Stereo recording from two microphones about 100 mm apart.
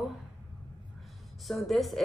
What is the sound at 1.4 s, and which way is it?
Speech, centre (ahead or behind).